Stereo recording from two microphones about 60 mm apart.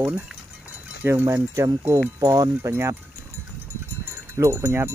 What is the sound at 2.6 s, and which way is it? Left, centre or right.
Speech, right.